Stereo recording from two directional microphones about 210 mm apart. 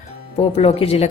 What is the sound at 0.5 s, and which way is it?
Speech, 30° left (ahead or behind).